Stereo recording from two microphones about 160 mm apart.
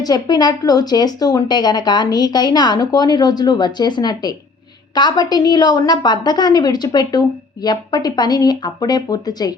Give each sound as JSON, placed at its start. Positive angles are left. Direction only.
{"t": 0.0, "sound": "a woman's voice", "side_deg": 25}